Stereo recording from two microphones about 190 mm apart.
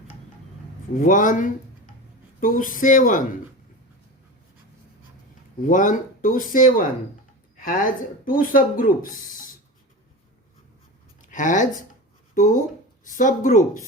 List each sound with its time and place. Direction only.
0.9 s speech: 45° left (ahead or behind)
5.6 s speech: 45° left (ahead or behind)
11.2 s a sound: 40° left (ahead or behind)
12.3 s speech: 45° left (ahead or behind)